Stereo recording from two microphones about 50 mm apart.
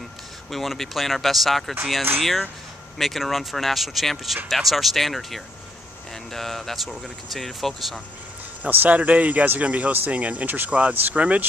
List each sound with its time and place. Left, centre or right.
0.5 s speech: centre
8.6 s speech: right